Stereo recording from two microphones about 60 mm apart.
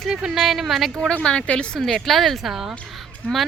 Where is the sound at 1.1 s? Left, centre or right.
Centre.